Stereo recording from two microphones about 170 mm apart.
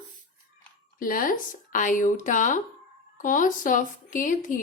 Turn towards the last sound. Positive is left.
turn(degrees=50)  # may be behind; listen again after turning